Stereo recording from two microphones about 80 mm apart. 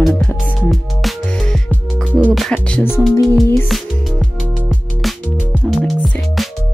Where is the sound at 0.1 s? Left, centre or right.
Left.